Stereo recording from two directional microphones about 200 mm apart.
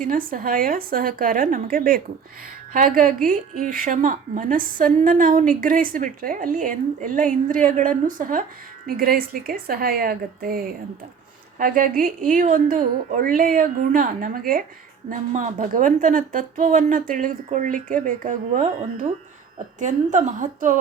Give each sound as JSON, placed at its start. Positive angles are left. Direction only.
{"t": 0.0, "sound": "a woman's voice", "side_deg": -45}